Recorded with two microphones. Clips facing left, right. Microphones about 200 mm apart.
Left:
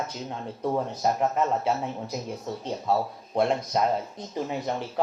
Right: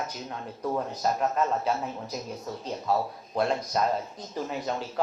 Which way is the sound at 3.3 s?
25° left (ahead or behind).